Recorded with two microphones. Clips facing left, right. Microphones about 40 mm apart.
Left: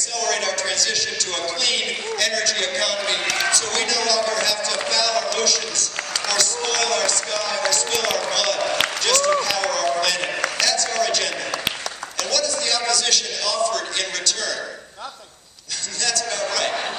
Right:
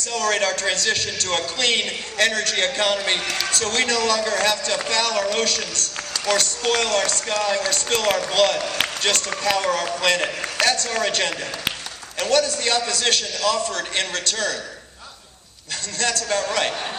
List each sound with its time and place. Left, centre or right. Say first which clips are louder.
0.0 s a man's voice: right 2 dB; right
10.6 s a sound: right 4 dB; right
10.9 s a man's voice: even; right
16.0 s a man's voice: right 2 dB; right